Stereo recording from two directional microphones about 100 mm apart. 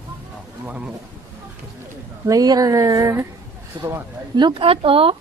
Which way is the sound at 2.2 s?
40° right (ahead or behind).